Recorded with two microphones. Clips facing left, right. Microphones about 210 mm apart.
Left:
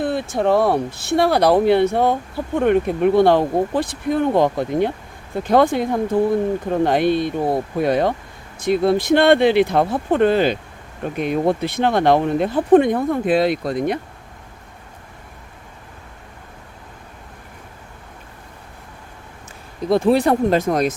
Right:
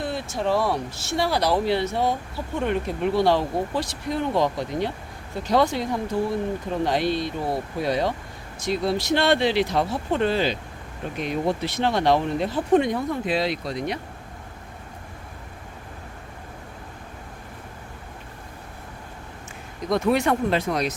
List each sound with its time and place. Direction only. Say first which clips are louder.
0.0 s speech: left 7 dB; 55° left (ahead or behind)
19.9 s speech: left 6 dB; 30° left (ahead or behind); by 20.9 s 45° left (ahead or behind)